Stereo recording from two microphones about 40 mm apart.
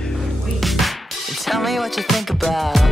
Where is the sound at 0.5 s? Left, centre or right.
Centre.